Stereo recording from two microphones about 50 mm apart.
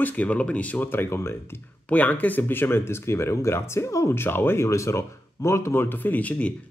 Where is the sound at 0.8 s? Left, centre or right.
Left.